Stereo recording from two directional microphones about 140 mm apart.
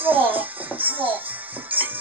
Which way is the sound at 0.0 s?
10° right (ahead or behind).